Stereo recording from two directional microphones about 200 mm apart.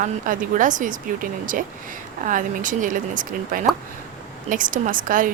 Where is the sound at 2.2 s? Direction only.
40° right (ahead or behind).